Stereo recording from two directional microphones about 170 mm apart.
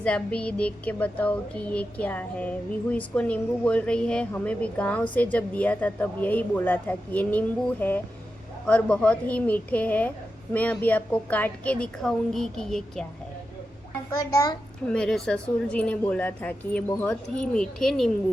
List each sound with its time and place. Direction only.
0.0 s speech: 5° left (ahead or behind)
14.2 s a child's voice: 20° left (ahead or behind)
14.8 s speech: 5° left (ahead or behind)